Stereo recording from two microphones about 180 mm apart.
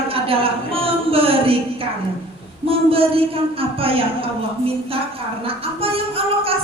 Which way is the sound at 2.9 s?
30° right (ahead or behind).